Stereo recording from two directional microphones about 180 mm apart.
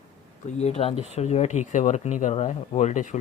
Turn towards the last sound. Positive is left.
turn(degrees=45)  # may be behind; listen again after turning